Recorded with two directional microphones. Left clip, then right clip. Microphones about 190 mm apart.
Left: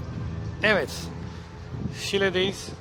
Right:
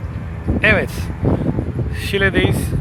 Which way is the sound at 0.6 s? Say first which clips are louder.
Right 7 dB; 5° left (ahead or behind).